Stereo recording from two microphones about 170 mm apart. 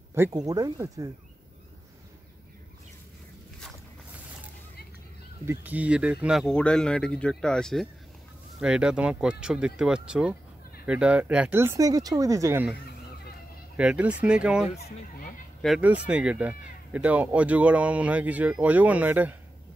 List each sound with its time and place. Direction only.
0.1 s speech: 20° right (ahead or behind)
5.4 s speech: 10° right (ahead or behind)
13.7 s speech: 5° right (ahead or behind)
14.8 s speech: 65° left (ahead or behind)
15.8 s speech: 10° right (ahead or behind)